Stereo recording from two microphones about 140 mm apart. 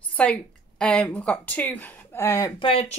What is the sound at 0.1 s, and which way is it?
A woman's voice, 10° left (ahead or behind).